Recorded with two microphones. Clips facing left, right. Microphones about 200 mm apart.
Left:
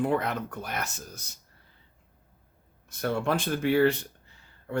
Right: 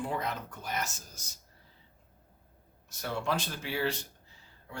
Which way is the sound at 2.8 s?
55° left (ahead or behind).